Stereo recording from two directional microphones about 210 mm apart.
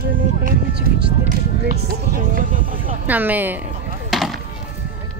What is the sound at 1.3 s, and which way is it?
Speech, 45° right (ahead or behind).